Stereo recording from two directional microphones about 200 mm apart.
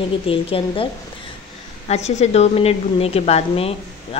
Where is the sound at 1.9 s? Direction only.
35° left (ahead or behind).